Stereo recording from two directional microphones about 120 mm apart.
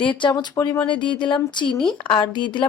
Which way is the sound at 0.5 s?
30° left (ahead or behind).